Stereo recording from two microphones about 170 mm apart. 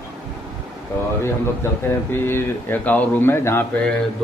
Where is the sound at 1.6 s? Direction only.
15° left (ahead or behind).